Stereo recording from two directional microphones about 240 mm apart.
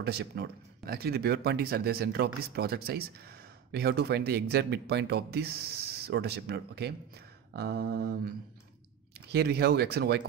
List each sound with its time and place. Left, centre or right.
0.0 s speech: right
9.3 s speech: right